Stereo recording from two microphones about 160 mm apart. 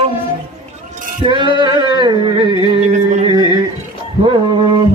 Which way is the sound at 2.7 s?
45° right (ahead or behind).